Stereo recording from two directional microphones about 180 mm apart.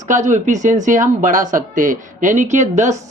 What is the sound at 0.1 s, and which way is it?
Speech, 40° right (ahead or behind).